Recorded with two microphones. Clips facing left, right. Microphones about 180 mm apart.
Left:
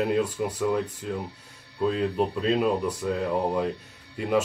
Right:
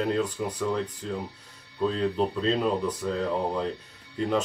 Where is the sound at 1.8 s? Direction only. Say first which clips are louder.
Left 1 dB; 10° left (ahead or behind).